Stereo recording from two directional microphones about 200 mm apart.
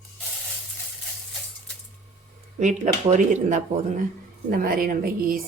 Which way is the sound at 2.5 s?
35° right (ahead or behind).